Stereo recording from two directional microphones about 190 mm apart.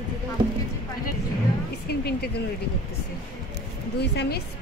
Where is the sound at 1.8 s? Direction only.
55° left (ahead or behind).